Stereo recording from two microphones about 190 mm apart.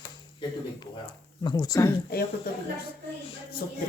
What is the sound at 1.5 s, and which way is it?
Speech, 20° left (ahead or behind).